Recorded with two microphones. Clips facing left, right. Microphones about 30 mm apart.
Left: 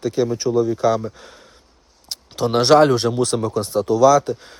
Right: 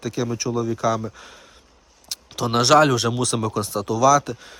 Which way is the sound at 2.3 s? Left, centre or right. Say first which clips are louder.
Left 3 dB; centre.